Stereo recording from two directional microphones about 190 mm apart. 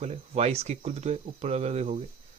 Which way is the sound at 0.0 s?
35° right (ahead or behind).